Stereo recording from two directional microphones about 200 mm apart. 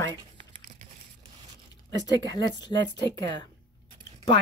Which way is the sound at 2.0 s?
20° left (ahead or behind).